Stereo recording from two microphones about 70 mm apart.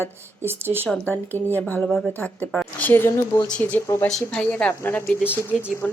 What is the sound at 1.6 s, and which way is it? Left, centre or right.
Speech, left.